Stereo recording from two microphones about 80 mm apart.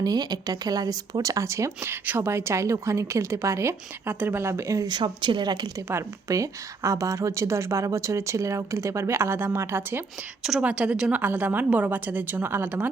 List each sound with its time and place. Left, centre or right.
0.0 s a woman's voice: right
4.9 s speech: right
5.7 s a woman's voice: right
10.6 s a woman's voice: centre
11.1 s a woman's voice: right